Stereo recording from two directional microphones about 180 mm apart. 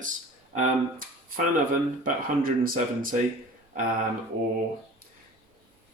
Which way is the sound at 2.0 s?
50° right (ahead or behind).